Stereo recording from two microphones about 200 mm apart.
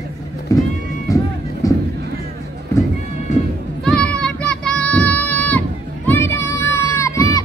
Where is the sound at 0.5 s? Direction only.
15° left (ahead or behind).